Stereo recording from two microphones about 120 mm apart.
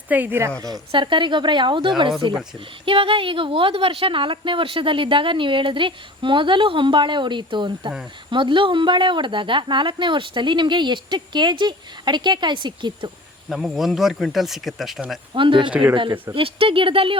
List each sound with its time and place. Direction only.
0.1 s speech: 15° right (ahead or behind)
0.9 s a woman's voice: 40° right (ahead or behind)
13.5 s speech: centre (ahead or behind)
15.4 s speech: 45° right (ahead or behind)
15.7 s speech: 10° right (ahead or behind)
16.3 s speech: 50° right (ahead or behind)